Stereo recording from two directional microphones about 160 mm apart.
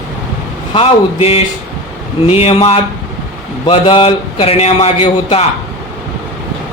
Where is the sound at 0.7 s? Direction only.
40° left (ahead or behind).